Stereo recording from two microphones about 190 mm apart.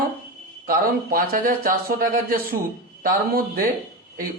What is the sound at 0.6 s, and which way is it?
Speech, 50° right (ahead or behind).